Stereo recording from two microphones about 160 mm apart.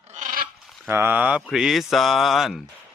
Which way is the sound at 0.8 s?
15° right (ahead or behind).